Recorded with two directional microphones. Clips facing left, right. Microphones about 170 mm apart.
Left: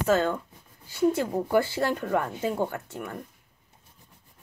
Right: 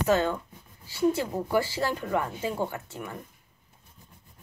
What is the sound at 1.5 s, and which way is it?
Speech, 55° left (ahead or behind).